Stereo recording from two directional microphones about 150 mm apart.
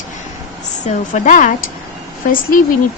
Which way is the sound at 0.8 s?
60° left (ahead or behind).